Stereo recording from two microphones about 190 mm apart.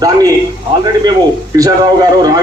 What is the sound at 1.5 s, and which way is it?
Speech, 20° right (ahead or behind).